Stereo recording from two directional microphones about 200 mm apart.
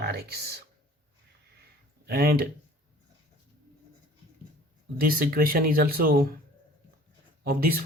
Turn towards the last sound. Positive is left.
turn(degrees=-45)  # may be behind; listen again after turning